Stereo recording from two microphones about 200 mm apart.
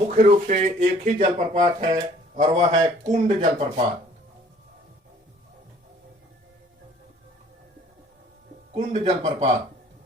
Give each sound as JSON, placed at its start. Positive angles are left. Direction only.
{"t": 0.1, "sound": "speech", "side_deg": -40}
{"t": 8.7, "sound": "speech", "side_deg": -35}